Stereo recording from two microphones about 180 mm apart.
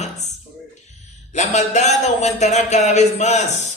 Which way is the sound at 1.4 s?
40° left (ahead or behind).